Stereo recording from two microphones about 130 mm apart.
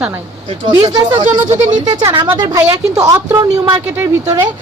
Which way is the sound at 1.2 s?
65° right (ahead or behind).